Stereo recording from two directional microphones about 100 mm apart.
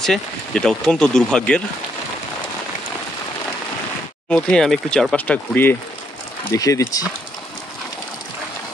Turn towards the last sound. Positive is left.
turn(degrees=35)  # may be behind; listen again after turning